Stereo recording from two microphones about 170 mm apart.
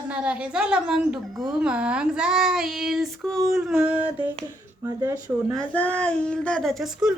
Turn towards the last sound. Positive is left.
turn(degrees=-5)  # may be behind; listen again after turning